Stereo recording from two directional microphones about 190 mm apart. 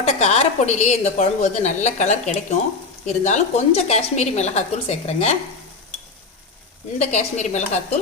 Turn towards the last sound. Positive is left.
turn(degrees=40)  # may be behind; listen again after turning